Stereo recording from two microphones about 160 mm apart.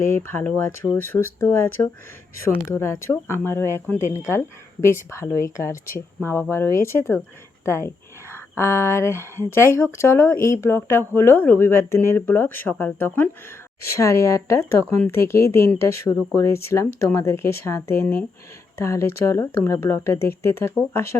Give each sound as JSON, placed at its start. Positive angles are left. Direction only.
{"t": 0.0, "sound": "speech", "side_deg": 15}